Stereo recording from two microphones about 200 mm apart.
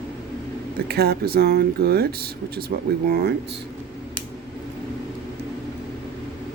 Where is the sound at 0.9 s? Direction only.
50° right (ahead or behind).